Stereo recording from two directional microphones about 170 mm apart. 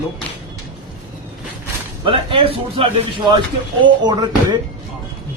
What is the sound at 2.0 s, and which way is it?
A man's voice, 30° right (ahead or behind).